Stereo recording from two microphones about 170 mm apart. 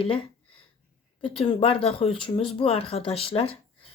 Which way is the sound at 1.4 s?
30° left (ahead or behind).